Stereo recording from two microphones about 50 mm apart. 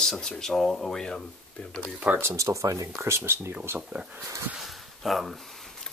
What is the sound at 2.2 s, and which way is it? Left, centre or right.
Speech, right.